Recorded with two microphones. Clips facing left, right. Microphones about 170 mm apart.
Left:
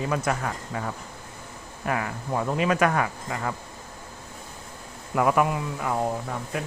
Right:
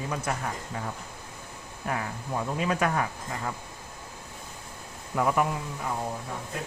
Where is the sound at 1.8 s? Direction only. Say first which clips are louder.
Left 4 dB; 90° left.